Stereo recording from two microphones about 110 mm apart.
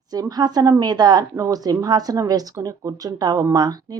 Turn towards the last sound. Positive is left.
turn(degrees=-35)  # may be behind; listen again after turning